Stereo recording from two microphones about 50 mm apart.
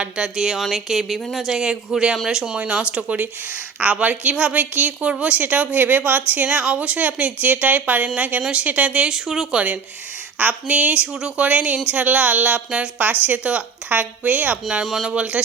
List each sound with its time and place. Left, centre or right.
0.0 s a woman's voice: centre
10.3 s a woman's voice: right
14.7 s a woman's voice: centre
15.1 s a woman's voice: right